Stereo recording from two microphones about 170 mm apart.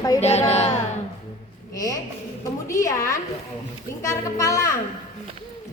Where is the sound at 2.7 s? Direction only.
20° left (ahead or behind).